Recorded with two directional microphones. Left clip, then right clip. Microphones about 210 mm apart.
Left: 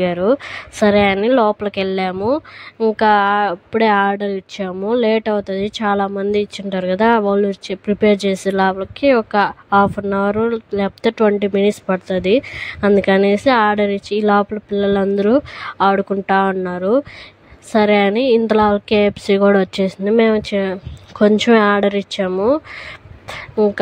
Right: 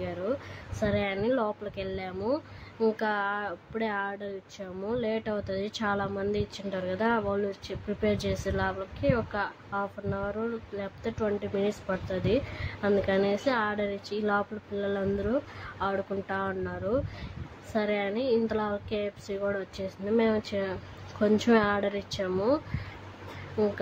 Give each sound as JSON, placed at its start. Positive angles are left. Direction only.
{"t": 0.0, "sound": "speech", "side_deg": 45}